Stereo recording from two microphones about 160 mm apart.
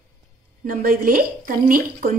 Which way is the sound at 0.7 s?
65° right (ahead or behind).